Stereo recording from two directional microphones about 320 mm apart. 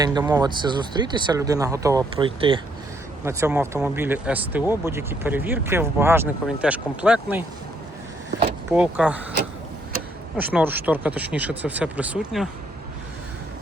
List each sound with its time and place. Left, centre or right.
0.0 s speech: centre
8.7 s speech: centre
10.3 s speech: centre